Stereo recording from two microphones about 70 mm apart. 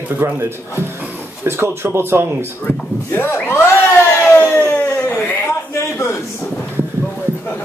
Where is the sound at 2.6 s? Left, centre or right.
Left.